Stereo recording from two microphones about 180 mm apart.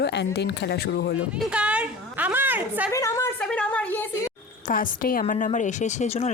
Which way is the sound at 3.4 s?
5° left (ahead or behind).